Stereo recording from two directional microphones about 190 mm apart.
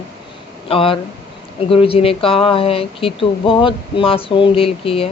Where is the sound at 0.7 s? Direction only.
30° left (ahead or behind).